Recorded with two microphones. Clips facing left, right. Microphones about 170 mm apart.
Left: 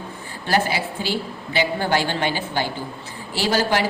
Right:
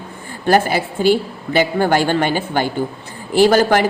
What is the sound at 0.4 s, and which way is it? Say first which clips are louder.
A woman's voice: right 7 dB; 50° right (ahead or behind).